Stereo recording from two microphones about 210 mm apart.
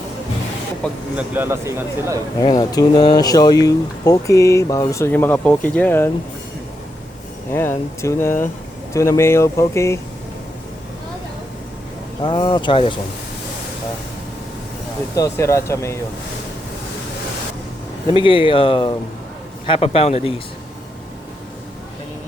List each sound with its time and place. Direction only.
1.1 s speech: 10° right (ahead or behind)
2.4 s speech: 20° left (ahead or behind)
7.5 s speech: 10° left (ahead or behind)
12.2 s speech: 20° left (ahead or behind)
15.1 s speech: 15° left (ahead or behind)
18.1 s speech: 25° left (ahead or behind)